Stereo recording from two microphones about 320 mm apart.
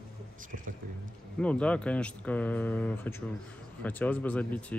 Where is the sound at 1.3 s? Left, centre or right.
Centre.